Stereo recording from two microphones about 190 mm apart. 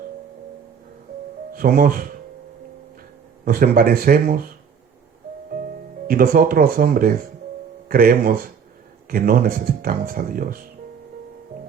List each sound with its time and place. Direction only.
1.5 s speech: 50° right (ahead or behind)
3.4 s speech: 50° right (ahead or behind)
6.1 s speech: 50° right (ahead or behind)